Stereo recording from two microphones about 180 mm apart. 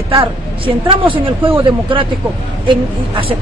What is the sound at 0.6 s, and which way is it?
Speech, 30° right (ahead or behind).